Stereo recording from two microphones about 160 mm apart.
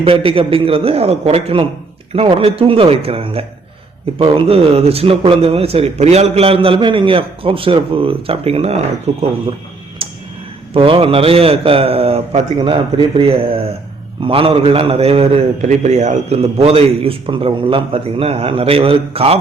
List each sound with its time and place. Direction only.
0.0 s a man's voice: 35° right (ahead or behind)
10.0 s tick-tock: 35° right (ahead or behind)
10.8 s a man's voice: 35° right (ahead or behind)